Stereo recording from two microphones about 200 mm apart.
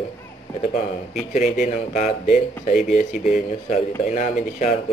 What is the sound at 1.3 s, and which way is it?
A man's voice, 35° left (ahead or behind).